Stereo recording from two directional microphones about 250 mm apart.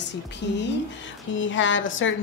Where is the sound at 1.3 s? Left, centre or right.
Left.